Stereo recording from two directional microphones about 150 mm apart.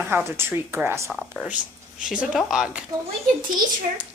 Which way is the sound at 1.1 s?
Centre (ahead or behind).